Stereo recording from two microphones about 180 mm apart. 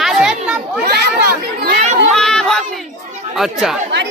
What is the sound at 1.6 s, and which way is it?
Children playing, 40° right (ahead or behind).